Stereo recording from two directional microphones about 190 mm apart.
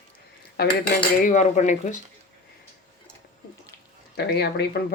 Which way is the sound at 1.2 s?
40° left (ahead or behind).